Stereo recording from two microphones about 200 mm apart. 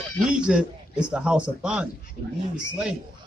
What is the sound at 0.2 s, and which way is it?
Speech, 5° right (ahead or behind).